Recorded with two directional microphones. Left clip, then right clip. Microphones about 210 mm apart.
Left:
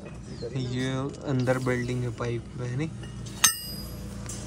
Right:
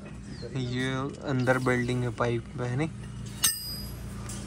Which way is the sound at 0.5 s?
10° left (ahead or behind).